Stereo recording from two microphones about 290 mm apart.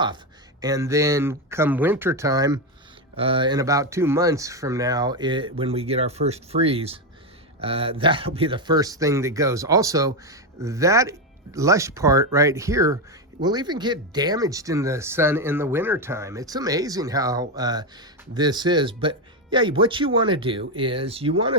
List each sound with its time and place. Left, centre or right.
0.6 s speech: centre